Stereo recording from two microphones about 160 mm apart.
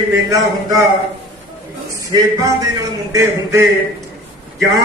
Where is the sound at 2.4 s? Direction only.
20° right (ahead or behind).